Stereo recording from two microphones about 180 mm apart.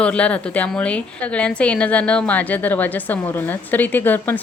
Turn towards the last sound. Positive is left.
turn(degrees=10)  # may be behind; listen again after turning